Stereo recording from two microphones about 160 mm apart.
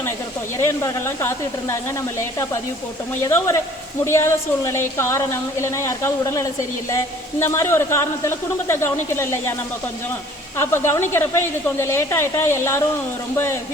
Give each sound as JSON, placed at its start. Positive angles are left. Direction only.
{"t": 0.6, "sound": "a man's voice", "side_deg": 15}
{"t": 10.6, "sound": "a man's voice", "side_deg": 15}